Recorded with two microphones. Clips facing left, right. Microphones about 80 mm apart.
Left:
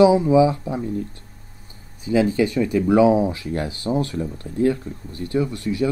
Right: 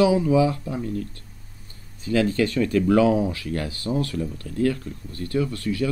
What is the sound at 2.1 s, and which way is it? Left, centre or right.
Speech, centre.